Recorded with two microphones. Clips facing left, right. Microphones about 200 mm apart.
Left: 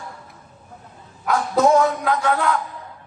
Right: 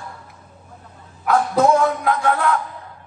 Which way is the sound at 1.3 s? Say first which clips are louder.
Right 1 dB; 55° right (ahead or behind).